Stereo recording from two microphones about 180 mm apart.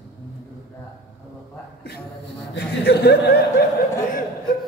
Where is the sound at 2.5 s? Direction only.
65° left (ahead or behind).